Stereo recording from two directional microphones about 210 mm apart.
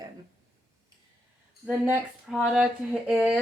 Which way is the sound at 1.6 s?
5° right (ahead or behind).